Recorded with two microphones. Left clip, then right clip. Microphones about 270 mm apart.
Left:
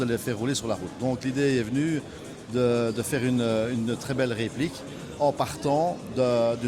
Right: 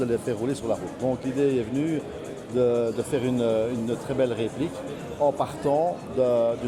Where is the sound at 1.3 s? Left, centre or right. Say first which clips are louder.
Even; left.